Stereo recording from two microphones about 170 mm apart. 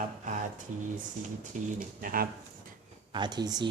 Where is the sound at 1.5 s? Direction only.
50° right (ahead or behind).